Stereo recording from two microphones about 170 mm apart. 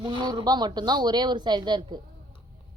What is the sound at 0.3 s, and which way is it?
Speech, 25° right (ahead or behind).